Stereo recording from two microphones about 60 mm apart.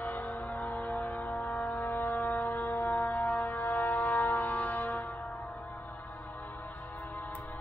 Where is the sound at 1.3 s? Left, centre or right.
Left.